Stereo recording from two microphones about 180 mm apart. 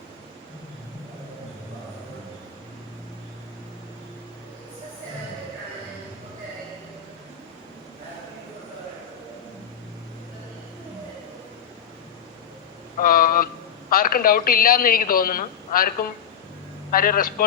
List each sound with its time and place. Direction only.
13.0 s a man's voice: 50° left (ahead or behind)
16.9 s a man's voice: 50° left (ahead or behind)